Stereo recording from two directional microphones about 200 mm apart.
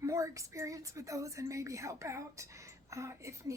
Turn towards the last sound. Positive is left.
turn(degrees=-15)  # may be behind; listen again after turning